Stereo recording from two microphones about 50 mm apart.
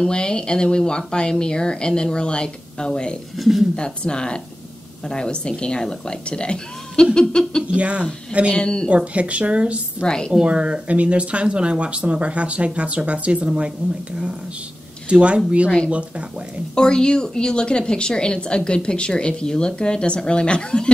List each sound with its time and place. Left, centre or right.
0.0 s a woman's voice: centre
3.3 s speech: centre
3.7 s a woman's voice: centre
7.6 s speech: right
8.5 s a woman's voice: centre
8.8 s speech: right
10.0 s a woman's voice: centre
10.3 s speech: right
16.7 s a woman's voice: centre